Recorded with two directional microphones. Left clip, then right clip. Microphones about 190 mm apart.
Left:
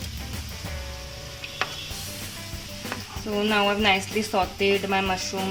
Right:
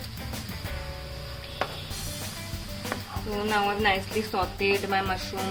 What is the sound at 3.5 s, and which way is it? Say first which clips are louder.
Speech: left 3 dB; 30° left (ahead or behind).